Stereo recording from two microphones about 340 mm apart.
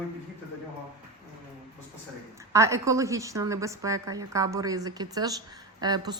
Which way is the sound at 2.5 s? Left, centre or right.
Centre.